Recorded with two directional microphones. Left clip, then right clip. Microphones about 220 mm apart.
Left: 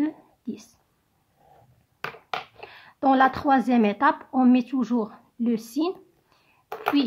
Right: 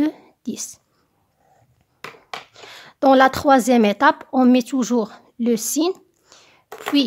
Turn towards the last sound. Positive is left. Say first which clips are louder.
# right 4 dB
turn(degrees=-40)  # may be behind; listen again after turning